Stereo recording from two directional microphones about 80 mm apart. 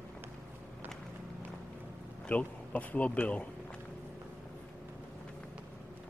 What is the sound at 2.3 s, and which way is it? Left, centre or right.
Speech, centre.